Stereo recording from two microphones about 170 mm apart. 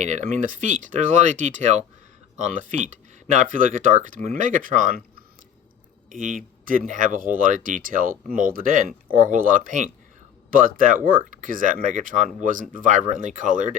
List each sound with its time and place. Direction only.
0.0 s speech: 45° right (ahead or behind)
6.1 s speech: 50° right (ahead or behind)